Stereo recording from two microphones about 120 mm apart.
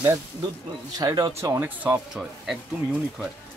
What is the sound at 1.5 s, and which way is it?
Speech, 15° right (ahead or behind).